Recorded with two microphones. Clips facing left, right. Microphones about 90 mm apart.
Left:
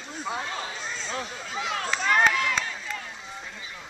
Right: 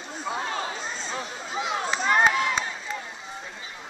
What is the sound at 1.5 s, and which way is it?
Run, 20° right (ahead or behind).